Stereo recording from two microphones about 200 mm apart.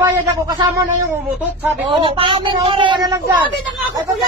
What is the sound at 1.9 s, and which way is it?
A man's voice, 25° right (ahead or behind).